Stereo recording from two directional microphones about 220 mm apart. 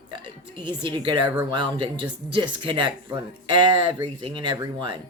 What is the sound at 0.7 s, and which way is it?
Speech, 20° right (ahead or behind).